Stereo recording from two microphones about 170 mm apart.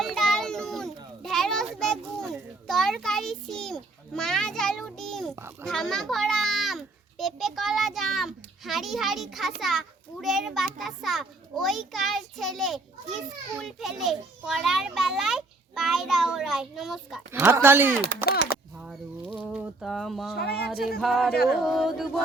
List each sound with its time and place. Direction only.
0.0 s children playing: centre (ahead or behind)
5.4 s speech: 15° right (ahead or behind)
5.6 s a child's voice: centre (ahead or behind)
17.4 s speech: 15° right (ahead or behind)
19.4 s a child's voice: 5° right (ahead or behind)
20.3 s speech: 70° left (ahead or behind)
21.0 s a child's voice: centre (ahead or behind)